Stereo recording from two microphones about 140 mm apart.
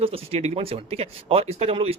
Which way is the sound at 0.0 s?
45° right (ahead or behind).